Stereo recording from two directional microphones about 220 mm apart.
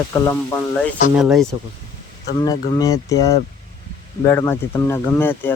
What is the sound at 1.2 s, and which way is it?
Speech, centre (ahead or behind).